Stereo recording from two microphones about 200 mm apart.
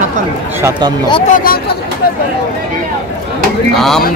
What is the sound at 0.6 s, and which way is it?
Speech, 20° right (ahead or behind).